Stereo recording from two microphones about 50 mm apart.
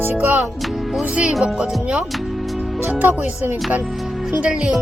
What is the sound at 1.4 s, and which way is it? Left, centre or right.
Speech, right.